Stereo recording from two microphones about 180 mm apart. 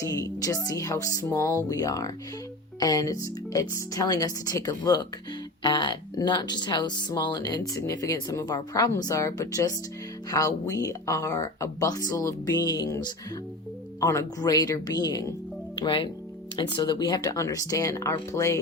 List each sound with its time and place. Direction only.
0.0 s speech: 20° left (ahead or behind)